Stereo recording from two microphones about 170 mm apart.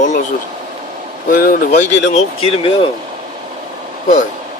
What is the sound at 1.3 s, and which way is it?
Speech, 60° left (ahead or behind).